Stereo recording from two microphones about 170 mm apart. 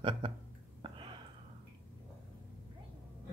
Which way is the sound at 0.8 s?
30° right (ahead or behind).